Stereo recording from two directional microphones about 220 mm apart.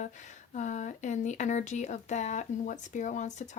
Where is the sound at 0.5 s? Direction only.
35° left (ahead or behind).